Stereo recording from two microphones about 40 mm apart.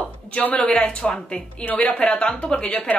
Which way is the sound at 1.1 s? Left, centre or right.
Centre.